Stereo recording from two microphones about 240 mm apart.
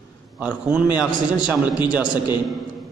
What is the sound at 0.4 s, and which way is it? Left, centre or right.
A man's voice, centre.